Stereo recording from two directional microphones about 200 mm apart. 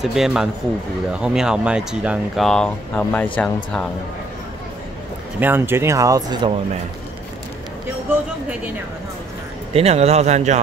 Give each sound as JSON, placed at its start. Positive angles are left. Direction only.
{"t": 0.0, "sound": "speech", "side_deg": 0}
{"t": 5.4, "sound": "speech", "side_deg": -10}
{"t": 9.8, "sound": "speech", "side_deg": -30}